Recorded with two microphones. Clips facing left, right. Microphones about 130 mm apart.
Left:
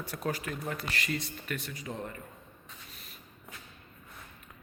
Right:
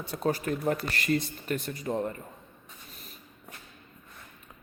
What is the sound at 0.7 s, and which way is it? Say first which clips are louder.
Speech: right 7 dB; 50° right (ahead or behind).